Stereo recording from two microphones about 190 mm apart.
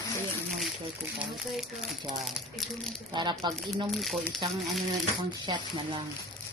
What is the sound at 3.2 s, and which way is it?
Speech, 25° right (ahead or behind).